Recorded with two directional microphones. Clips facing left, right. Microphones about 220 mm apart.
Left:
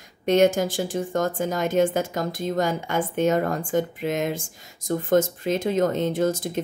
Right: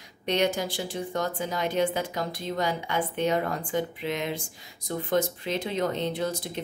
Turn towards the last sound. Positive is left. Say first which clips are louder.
# left 7 dB
turn(degrees=45)  # may be behind; listen again after turning